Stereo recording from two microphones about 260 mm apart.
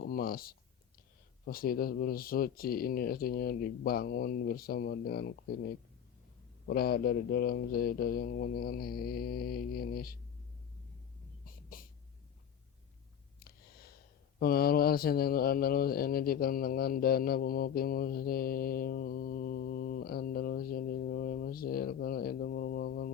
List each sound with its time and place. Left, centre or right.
0.0 s speech: left
1.5 s mantra: left
11.4 s a sound: left
14.3 s mantra: left